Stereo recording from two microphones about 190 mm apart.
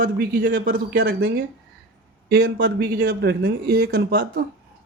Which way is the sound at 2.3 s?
55° right (ahead or behind).